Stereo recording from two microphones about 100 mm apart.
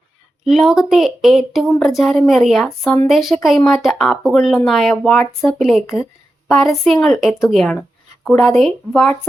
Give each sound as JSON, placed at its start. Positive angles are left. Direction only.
{"t": 0.4, "sound": "speech", "side_deg": -5}
{"t": 8.9, "sound": "speech", "side_deg": 15}